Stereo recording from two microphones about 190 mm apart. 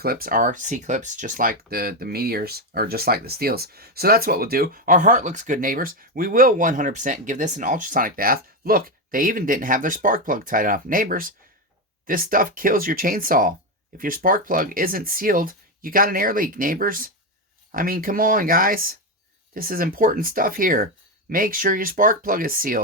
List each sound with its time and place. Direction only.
0.0 s speech: 50° right (ahead or behind)